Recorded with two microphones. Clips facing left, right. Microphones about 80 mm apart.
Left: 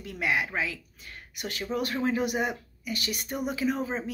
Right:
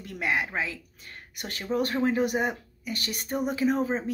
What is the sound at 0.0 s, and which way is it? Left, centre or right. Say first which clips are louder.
A woman's voice: even; right.